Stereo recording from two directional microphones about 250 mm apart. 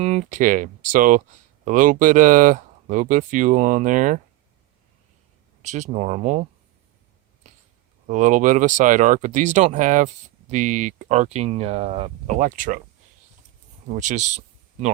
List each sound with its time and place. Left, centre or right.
0.0 s speech: right
5.6 s speech: right
8.0 s speech: right
13.8 s speech: right